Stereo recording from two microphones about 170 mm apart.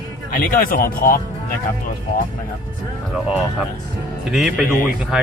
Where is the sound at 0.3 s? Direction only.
55° left (ahead or behind).